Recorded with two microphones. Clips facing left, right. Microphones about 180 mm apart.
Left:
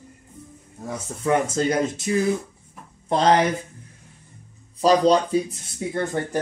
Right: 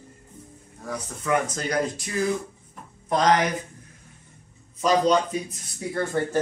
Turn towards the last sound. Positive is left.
turn(degrees=20)  # may be behind; listen again after turning